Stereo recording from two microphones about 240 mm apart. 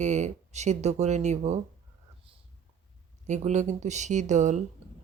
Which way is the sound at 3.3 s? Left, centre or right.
Right.